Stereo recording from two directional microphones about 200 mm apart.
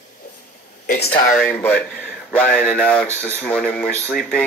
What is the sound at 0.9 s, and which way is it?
Speech, 55° left (ahead or behind).